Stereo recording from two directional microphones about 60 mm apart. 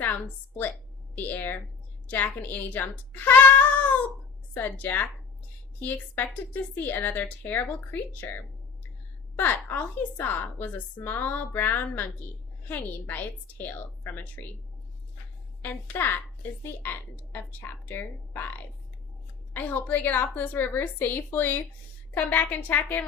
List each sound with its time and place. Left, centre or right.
0.0 s a woman's voice: left
4.5 s a woman's voice: left
15.6 s a woman's voice: left